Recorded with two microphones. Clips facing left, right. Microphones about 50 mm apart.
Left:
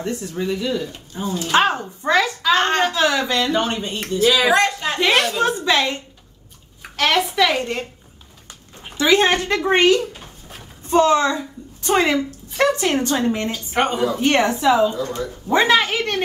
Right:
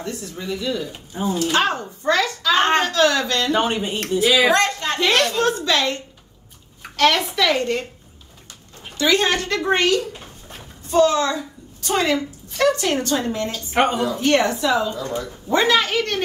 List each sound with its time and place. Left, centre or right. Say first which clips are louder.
0.0 s speech: left 5 dB; left
1.1 s speech: right 3 dB; centre
1.4 s speech: left 4 dB; left
2.5 s a sound: right 1 dB; centre
2.8 s a woman's voice: even; centre
3.5 s speech: right 1 dB; centre
4.6 s a woman's voice: left 1 dB; centre
7.0 s a woman's voice: even; centre
8.8 s a woman's voice: left 3 dB; left